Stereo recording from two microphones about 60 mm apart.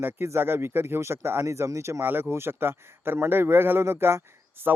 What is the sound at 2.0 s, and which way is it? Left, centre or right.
A man's voice, right.